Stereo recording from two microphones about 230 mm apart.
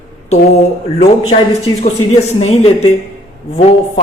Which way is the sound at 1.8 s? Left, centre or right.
Left.